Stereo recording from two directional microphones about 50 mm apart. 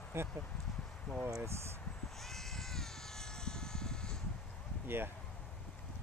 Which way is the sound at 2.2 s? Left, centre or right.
Centre.